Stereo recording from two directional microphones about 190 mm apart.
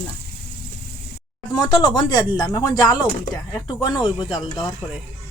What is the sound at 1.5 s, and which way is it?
Speech, 20° left (ahead or behind).